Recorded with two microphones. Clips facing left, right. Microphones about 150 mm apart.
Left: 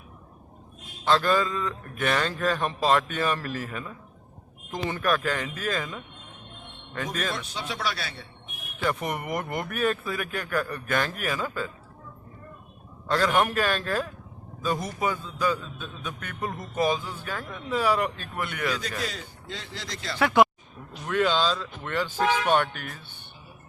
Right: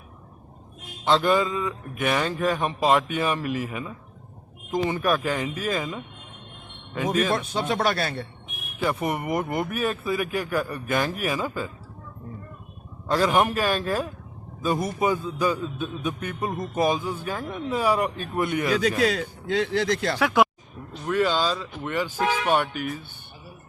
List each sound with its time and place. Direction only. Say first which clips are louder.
1.0 s a man's voice: right 2 dB; 15° right (ahead or behind)
7.3 s speech: right 8 dB; 50° right (ahead or behind)
8.8 s a man's voice: right 3 dB; 5° right (ahead or behind)
13.1 s a man's voice: right 2 dB; 10° right (ahead or behind)
18.7 s a man's voice: right 10 dB; 65° right (ahead or behind)
20.1 s a man's voice: left 4 dB; 5° right (ahead or behind)